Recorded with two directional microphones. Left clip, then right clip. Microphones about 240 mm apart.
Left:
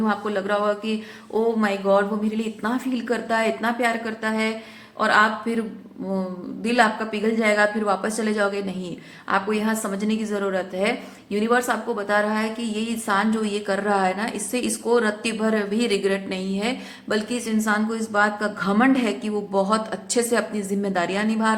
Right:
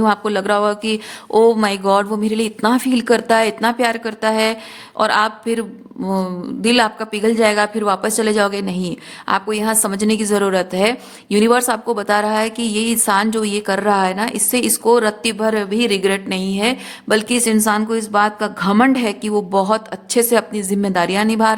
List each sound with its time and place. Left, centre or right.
0.0 s a woman's voice: right